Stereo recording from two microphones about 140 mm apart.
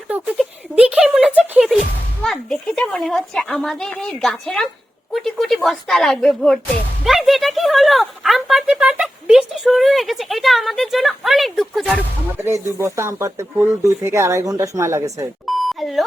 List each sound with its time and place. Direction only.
0.1 s a sound: 10° right (ahead or behind)
1.4 s music: 10° right (ahead or behind)
2.2 s speech: 5° left (ahead or behind)
12.4 s a woman's voice: 20° right (ahead or behind)
15.4 s beep: centre (ahead or behind)